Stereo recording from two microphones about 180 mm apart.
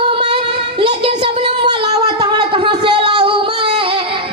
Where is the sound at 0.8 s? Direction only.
30° right (ahead or behind).